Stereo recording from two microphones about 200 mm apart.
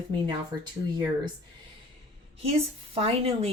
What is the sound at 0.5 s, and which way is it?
Speech, 20° right (ahead or behind).